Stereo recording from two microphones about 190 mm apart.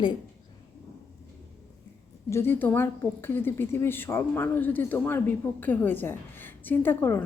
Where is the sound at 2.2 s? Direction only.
15° left (ahead or behind).